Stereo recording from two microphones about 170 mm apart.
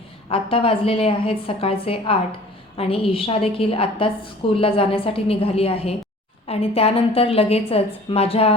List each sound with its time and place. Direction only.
0.3 s a woman's voice: 35° left (ahead or behind)